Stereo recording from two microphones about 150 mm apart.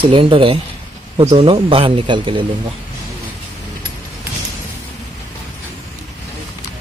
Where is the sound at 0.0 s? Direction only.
35° right (ahead or behind).